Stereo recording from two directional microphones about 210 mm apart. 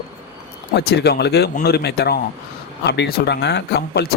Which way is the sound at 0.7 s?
55° left (ahead or behind).